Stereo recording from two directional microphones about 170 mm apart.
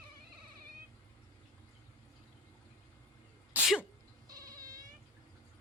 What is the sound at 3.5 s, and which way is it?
Sneeze, 5° right (ahead or behind).